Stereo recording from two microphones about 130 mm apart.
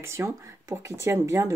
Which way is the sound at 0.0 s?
20° right (ahead or behind).